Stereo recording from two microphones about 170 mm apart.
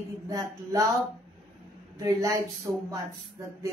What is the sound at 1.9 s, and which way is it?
Speech, 20° right (ahead or behind).